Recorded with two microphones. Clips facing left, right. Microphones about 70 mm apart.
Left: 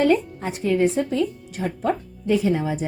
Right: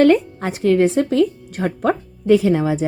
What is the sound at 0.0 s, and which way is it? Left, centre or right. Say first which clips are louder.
Speech: right 6 dB; right.